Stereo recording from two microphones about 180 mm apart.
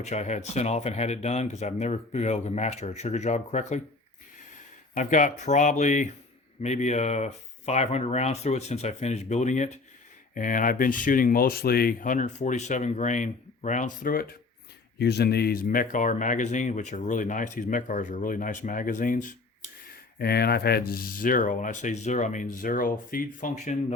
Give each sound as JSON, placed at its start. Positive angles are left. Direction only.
{"t": 0.0, "sound": "speech", "side_deg": 40}
{"t": 4.9, "sound": "speech", "side_deg": 45}
{"t": 14.9, "sound": "speech", "side_deg": 65}
{"t": 20.1, "sound": "speech", "side_deg": 60}